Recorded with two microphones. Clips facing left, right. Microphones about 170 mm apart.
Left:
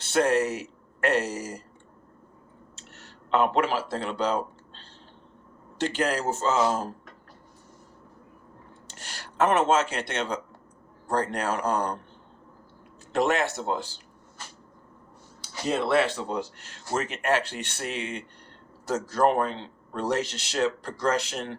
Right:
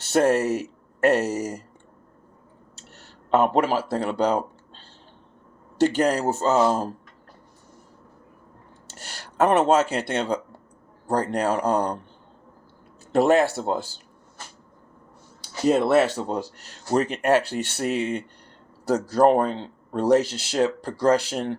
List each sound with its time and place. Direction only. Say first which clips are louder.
0.0 s speech: right 3 dB; 40° right (ahead or behind)
3.2 s speech: right 4 dB; 40° right (ahead or behind)
6.0 s speech: right 5 dB; 40° right (ahead or behind)
9.0 s speech: right 3 dB; 35° right (ahead or behind)
13.1 s speech: right 6 dB; 35° right (ahead or behind)
15.7 s speech: right 4 dB; 45° right (ahead or behind)